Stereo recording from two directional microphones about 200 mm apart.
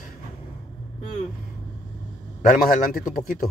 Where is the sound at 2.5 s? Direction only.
45° left (ahead or behind).